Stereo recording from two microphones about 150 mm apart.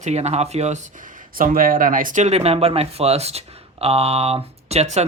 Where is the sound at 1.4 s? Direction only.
70° right (ahead or behind).